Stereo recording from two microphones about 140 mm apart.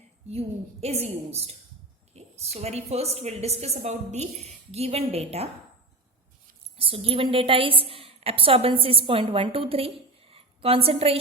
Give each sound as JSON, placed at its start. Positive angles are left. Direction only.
{"t": 0.3, "sound": "a woman's voice", "side_deg": -50}
{"t": 6.7, "sound": "a woman's voice", "side_deg": -45}